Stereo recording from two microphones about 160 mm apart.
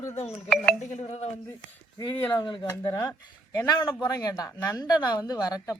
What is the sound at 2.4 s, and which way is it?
A woman's voice, 30° left (ahead or behind).